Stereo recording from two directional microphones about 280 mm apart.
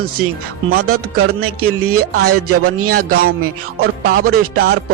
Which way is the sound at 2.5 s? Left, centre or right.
Right.